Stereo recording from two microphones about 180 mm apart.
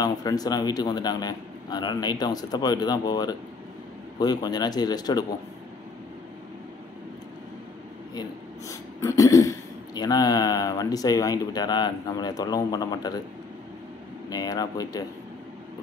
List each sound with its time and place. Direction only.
0.0 s speech: 20° left (ahead or behind)
8.1 s speech: 20° left (ahead or behind)
14.3 s speech: 20° left (ahead or behind)